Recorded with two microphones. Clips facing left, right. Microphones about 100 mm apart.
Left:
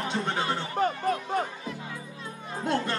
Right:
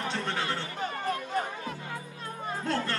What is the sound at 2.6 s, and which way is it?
Music, 15° left (ahead or behind).